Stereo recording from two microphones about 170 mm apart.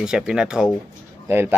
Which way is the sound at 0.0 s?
5° right (ahead or behind).